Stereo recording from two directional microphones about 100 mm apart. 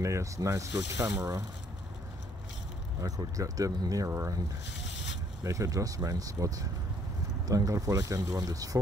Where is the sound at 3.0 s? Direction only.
35° right (ahead or behind).